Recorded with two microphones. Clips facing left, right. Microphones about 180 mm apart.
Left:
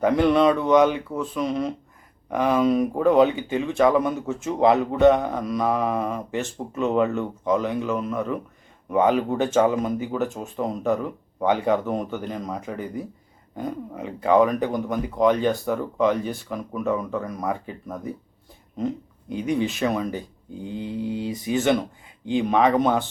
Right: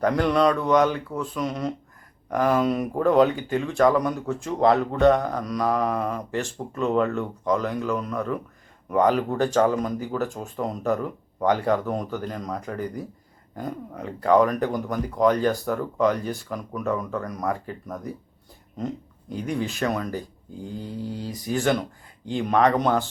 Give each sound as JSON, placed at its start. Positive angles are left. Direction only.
{"t": 0.0, "sound": "speech", "side_deg": 5}
{"t": 19.4, "sound": "speech", "side_deg": 0}
{"t": 21.1, "sound": "speech", "side_deg": 0}